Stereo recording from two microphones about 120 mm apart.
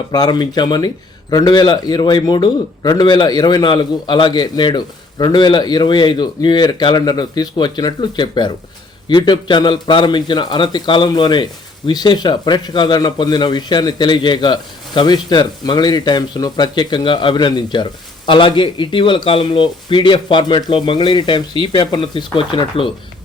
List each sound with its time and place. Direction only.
0.1 s a man's voice: 35° left (ahead or behind)